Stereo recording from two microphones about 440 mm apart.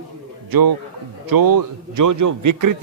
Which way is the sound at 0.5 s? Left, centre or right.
Right.